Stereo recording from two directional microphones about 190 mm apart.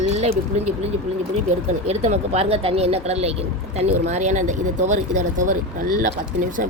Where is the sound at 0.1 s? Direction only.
35° right (ahead or behind).